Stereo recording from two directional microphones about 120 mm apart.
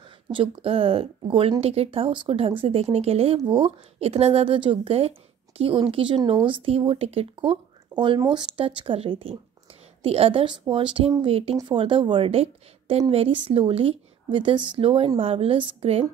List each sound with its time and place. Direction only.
0.3 s speech: 50° right (ahead or behind)
3.3 s a woman's voice: 45° right (ahead or behind)